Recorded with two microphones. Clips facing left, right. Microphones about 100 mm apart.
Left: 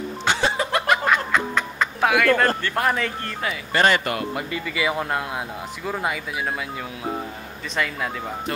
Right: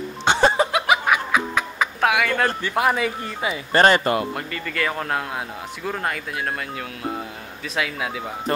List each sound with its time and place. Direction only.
0.3 s a sound: 25° right (ahead or behind)
0.7 s music: 5° right (ahead or behind)
3.7 s speech: 35° right (ahead or behind)
4.5 s speech: 10° left (ahead or behind)
7.7 s speech: 5° right (ahead or behind)